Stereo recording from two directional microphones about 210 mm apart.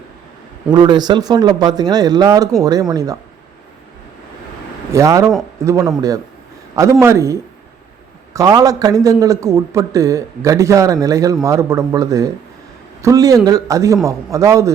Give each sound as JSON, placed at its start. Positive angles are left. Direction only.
{"t": 0.7, "sound": "a man's voice", "side_deg": -20}
{"t": 4.9, "sound": "a man's voice", "side_deg": -15}
{"t": 7.0, "sound": "a man's voice", "side_deg": -15}